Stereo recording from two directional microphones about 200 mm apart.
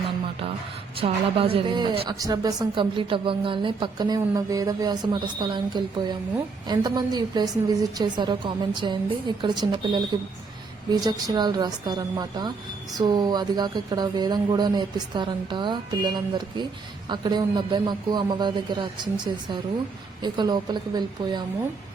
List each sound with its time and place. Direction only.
0.9 s a woman's voice: 30° right (ahead or behind)
11.0 s a woman's voice: 20° right (ahead or behind)